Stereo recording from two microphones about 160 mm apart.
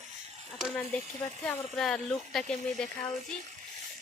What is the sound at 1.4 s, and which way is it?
Speech, 5° left (ahead or behind).